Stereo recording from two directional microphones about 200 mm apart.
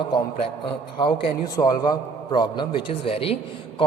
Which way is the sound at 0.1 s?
25° left (ahead or behind).